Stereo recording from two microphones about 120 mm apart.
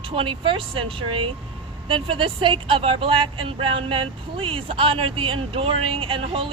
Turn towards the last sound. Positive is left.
turn(degrees=-50)  # may be behind; listen again after turning